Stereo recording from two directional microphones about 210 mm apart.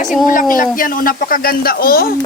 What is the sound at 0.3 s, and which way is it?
Speech, 40° left (ahead or behind).